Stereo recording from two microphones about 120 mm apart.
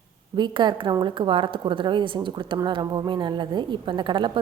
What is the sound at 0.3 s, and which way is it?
A woman's voice, 40° right (ahead or behind).